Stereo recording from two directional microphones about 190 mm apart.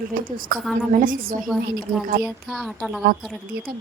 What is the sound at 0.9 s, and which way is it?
Speech, 45° right (ahead or behind).